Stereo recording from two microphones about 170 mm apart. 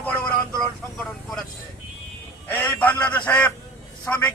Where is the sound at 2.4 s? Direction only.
10° left (ahead or behind).